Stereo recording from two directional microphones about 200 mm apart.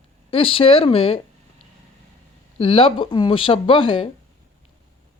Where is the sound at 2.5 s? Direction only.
25° left (ahead or behind).